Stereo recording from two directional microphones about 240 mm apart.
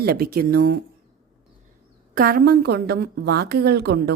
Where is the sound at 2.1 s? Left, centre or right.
Right.